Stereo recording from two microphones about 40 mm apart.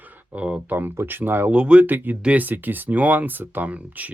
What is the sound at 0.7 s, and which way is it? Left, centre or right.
Speech, right.